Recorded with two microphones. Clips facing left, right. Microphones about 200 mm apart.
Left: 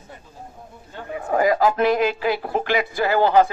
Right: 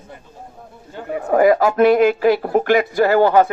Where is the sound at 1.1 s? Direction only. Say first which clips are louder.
Right 6 dB; 45° right (ahead or behind).